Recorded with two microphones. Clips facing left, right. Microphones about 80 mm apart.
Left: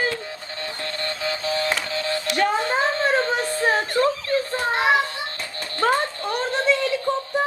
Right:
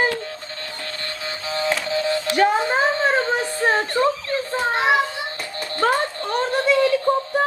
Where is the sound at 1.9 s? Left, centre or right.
Right.